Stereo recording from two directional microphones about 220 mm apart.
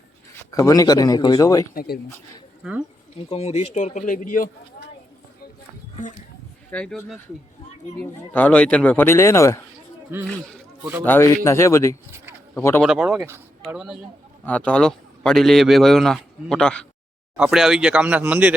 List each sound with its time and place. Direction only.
0.5 s speech: 15° left (ahead or behind)
1.7 s speech: 40° left (ahead or behind)
3.2 s speech: 30° left (ahead or behind)
6.7 s a man's voice: 5° left (ahead or behind)
10.1 s speech: 10° right (ahead or behind)
11.0 s a man's voice: 10° left (ahead or behind); by 18.5 s 5° right (ahead or behind)